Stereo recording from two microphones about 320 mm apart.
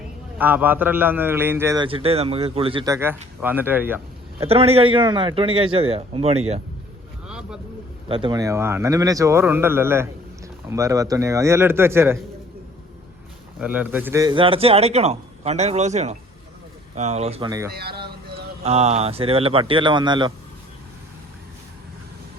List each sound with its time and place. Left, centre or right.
0.3 s a man's voice: centre
4.4 s a man's voice: centre
7.3 s vehicle: centre
8.0 s a man's voice: centre
13.6 s a man's voice: centre
17.7 s a man's voice: right
18.6 s a man's voice: centre